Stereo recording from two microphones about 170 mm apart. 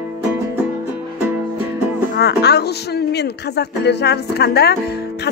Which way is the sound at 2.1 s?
75° left (ahead or behind).